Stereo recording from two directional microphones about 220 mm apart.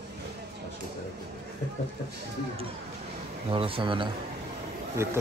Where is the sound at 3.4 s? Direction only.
25° right (ahead or behind).